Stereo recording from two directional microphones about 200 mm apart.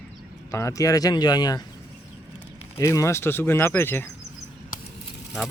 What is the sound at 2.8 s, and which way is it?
A man's voice, 15° left (ahead or behind).